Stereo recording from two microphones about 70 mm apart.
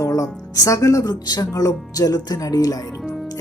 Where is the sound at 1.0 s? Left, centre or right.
Left.